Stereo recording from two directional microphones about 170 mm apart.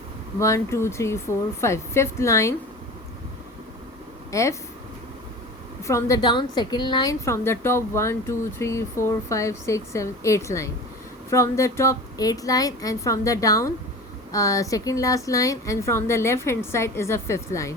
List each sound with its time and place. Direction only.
0.3 s a woman's voice: 15° left (ahead or behind)
4.3 s speech: 20° left (ahead or behind)
5.8 s a woman's voice: 20° left (ahead or behind)